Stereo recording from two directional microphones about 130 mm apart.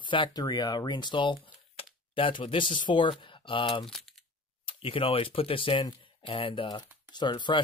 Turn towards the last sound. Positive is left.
turn(degrees=35)  # may be behind; listen again after turning